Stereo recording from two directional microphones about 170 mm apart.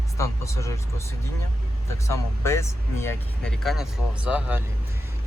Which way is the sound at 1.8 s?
15° left (ahead or behind).